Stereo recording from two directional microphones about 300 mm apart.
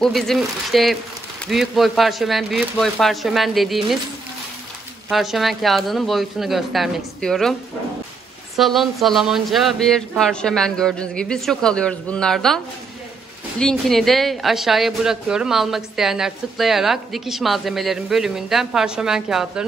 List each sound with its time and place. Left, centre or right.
0.0 s speech: centre
5.1 s speech: centre
8.5 s speech: centre
13.6 s speech: centre